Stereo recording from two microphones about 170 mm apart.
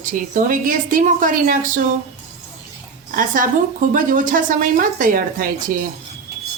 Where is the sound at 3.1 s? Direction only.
55° right (ahead or behind).